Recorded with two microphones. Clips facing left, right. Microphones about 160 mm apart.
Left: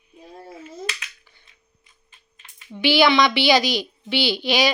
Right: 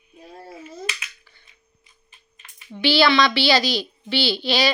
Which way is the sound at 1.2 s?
15° left (ahead or behind).